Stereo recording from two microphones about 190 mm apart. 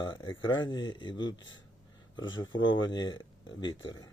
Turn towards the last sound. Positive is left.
turn(degrees=20)  # may be behind; listen again after turning